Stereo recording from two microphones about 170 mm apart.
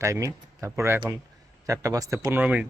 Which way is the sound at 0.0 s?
20° right (ahead or behind).